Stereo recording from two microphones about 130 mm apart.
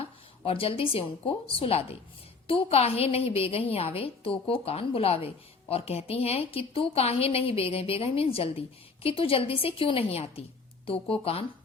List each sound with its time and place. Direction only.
0.0 s a woman's voice: 45° left (ahead or behind)